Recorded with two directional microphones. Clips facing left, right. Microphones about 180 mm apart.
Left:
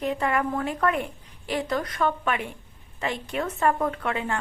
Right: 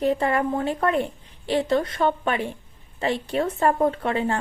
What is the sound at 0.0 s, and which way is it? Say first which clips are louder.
A woman's voice: right 4 dB; 35° right (ahead or behind).